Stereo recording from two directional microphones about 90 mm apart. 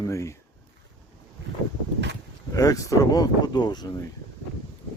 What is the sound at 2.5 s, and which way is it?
Speech, 40° left (ahead or behind).